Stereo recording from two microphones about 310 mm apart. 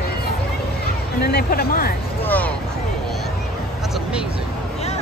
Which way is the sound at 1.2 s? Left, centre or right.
Left.